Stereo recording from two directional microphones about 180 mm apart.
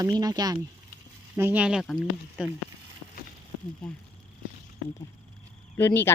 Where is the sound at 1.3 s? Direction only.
10° right (ahead or behind).